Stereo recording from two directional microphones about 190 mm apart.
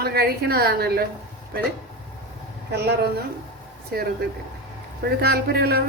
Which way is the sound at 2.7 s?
60° right (ahead or behind).